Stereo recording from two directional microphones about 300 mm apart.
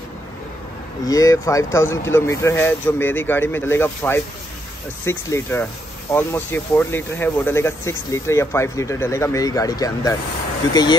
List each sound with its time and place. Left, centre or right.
1.0 s speech: centre